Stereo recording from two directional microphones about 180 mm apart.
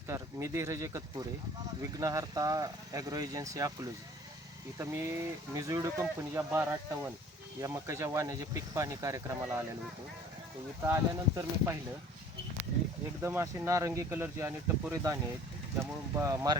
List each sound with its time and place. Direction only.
0.1 s speech: 15° right (ahead or behind)
10.8 s speech: 15° right (ahead or behind)
13.2 s speech: 15° right (ahead or behind)